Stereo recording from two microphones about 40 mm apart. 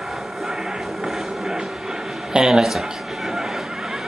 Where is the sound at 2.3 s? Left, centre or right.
Centre.